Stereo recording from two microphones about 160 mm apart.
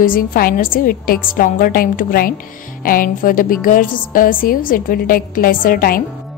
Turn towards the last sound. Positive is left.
turn(degrees=60)  # may be behind; listen again after turning